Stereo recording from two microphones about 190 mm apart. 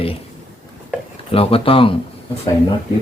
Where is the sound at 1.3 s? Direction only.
30° left (ahead or behind).